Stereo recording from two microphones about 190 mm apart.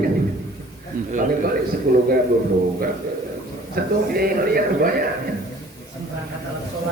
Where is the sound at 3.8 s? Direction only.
55° right (ahead or behind).